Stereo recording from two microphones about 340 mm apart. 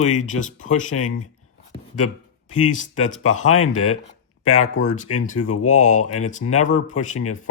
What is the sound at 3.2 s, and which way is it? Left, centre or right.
Speech, left.